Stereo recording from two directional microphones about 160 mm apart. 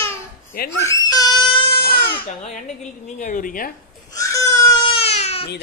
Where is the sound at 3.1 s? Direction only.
50° left (ahead or behind).